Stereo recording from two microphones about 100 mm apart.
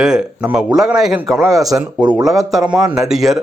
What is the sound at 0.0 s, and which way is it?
Speech, 5° right (ahead or behind).